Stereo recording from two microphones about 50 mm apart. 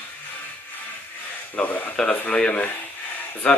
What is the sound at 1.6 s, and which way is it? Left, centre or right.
Speech, left.